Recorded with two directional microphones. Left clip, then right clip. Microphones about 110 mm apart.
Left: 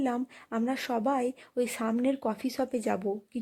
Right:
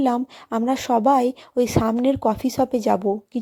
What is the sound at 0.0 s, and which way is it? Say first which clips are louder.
A woman's voice: right 10 dB; 20° right (ahead or behind).